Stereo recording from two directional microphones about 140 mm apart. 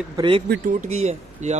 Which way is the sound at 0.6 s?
60° right (ahead or behind).